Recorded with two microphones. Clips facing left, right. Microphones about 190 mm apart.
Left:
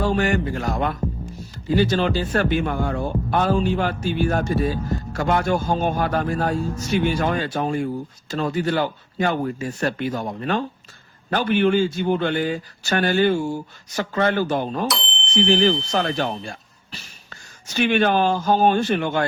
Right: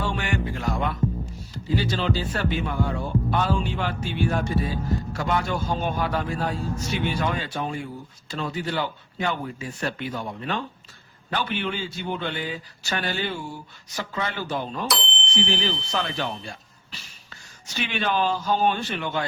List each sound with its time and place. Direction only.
0.0 s speech: 40° left (ahead or behind)
14.8 s a sound: centre (ahead or behind)
15.4 s speech: 45° left (ahead or behind)